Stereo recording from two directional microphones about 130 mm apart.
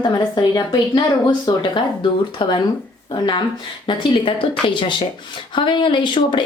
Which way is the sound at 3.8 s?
40° left (ahead or behind).